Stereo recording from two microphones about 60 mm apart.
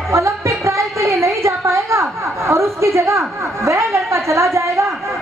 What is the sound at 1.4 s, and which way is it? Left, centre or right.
A woman's voice, right.